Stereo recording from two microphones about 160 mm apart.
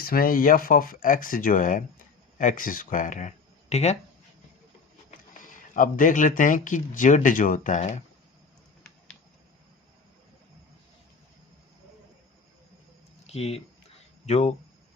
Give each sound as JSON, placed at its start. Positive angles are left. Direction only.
{"t": 0.0, "sound": "speech", "side_deg": 65}
{"t": 5.7, "sound": "speech", "side_deg": 55}
{"t": 13.2, "sound": "speech", "side_deg": 40}